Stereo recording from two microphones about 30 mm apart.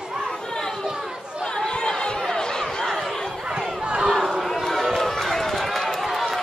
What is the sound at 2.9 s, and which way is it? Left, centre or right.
Chatter, centre.